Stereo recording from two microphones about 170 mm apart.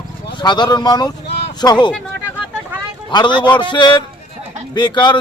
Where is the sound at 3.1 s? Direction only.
25° left (ahead or behind).